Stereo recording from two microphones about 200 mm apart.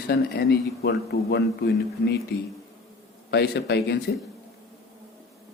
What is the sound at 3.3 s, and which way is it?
Speech, 55° left (ahead or behind).